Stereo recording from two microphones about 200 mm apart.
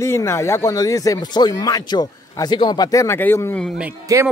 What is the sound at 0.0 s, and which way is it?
Speech, 15° left (ahead or behind).